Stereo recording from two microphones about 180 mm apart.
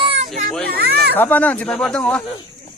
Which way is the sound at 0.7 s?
60° right (ahead or behind).